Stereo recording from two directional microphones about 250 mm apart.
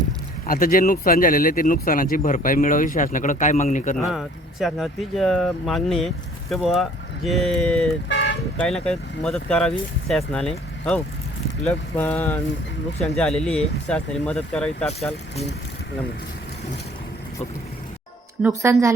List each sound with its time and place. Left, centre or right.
0.4 s speech: left
3.9 s speech: centre
8.1 s toot: left
8.6 s speech: centre
18.4 s a woman's voice: centre